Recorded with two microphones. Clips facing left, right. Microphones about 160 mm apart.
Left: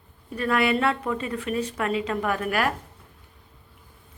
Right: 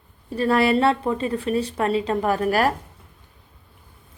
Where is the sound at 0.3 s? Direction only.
30° right (ahead or behind).